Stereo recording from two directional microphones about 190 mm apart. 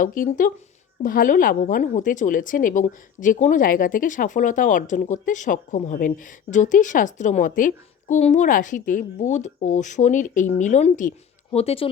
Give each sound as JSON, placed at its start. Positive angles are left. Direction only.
{"t": 0.0, "sound": "speech", "side_deg": 45}